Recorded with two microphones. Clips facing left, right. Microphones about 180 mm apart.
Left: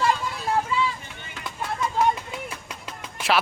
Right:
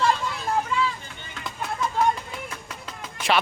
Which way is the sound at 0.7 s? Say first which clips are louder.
Right 1 dB; 5° left (ahead or behind).